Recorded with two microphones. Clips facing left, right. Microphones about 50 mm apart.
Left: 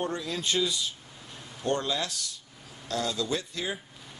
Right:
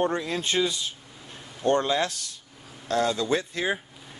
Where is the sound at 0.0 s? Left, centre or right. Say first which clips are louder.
Right 5 dB; right.